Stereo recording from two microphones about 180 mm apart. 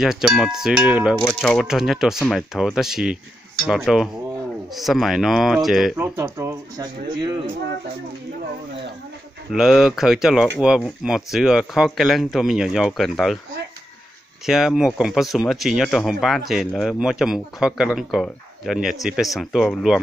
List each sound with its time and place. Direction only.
0.0 s speech: centre (ahead or behind); by 7.4 s 25° right (ahead or behind)
9.5 s speech: centre (ahead or behind)
14.4 s speech: centre (ahead or behind)